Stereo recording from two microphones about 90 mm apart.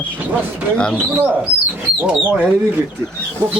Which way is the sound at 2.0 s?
10° right (ahead or behind).